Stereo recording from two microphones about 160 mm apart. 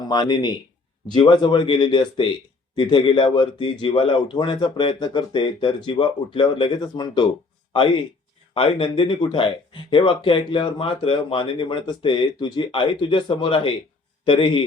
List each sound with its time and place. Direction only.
0.1 s speech: 25° left (ahead or behind)